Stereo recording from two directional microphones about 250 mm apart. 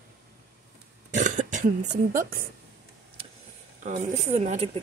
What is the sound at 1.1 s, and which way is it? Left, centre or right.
Throat clearing, right.